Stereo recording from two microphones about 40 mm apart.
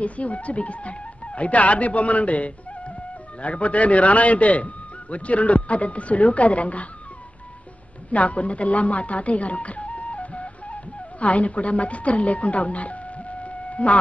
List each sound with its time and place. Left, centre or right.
0.0 s a man's voice: left
8.1 s speech: left